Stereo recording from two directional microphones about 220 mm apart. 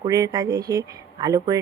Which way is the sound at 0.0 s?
15° right (ahead or behind).